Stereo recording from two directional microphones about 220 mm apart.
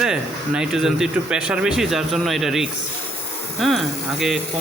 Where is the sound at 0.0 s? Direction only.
5° right (ahead or behind).